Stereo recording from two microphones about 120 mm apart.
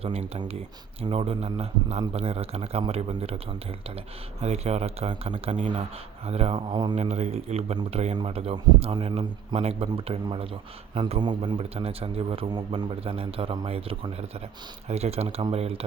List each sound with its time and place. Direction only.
0.0 s a man's voice: 60° right (ahead or behind)
4.4 s a man's voice: 60° right (ahead or behind); by 5.8 s 80° right
6.2 s a man's voice: 55° right (ahead or behind)
6.7 s a man's voice: 35° right (ahead or behind)
6.9 s a man's voice: 65° right (ahead or behind)
10.2 s a man's voice: 50° right (ahead or behind)
11.7 s a man's voice: 55° right (ahead or behind)